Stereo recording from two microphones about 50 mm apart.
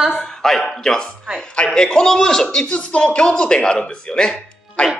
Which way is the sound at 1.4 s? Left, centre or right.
Centre.